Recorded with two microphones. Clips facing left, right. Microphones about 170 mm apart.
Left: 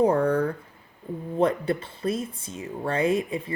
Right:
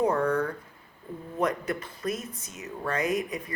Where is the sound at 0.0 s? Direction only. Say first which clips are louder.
Left 4 dB; 30° left (ahead or behind).